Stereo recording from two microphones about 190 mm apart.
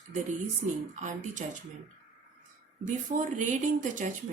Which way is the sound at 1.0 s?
40° right (ahead or behind).